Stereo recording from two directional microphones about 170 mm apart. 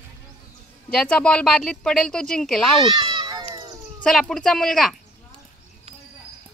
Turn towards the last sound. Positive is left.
turn(degrees=0)  # may be behind; listen again after turning